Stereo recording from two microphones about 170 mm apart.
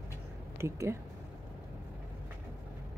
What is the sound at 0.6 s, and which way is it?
Speech, 15° right (ahead or behind).